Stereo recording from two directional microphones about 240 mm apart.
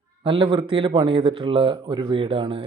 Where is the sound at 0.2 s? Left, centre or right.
Right.